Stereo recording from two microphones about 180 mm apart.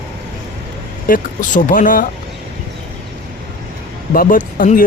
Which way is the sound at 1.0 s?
50° left (ahead or behind).